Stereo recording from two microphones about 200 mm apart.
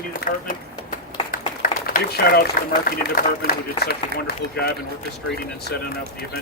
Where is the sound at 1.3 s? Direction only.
45° left (ahead or behind).